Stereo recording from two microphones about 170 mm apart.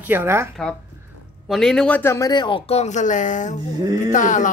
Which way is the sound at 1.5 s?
5° left (ahead or behind).